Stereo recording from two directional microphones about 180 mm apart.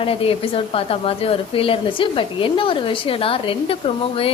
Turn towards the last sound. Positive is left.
turn(degrees=30)  # may be behind; listen again after turning